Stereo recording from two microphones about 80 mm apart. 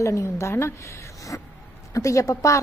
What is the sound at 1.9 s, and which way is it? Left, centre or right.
Speech, left.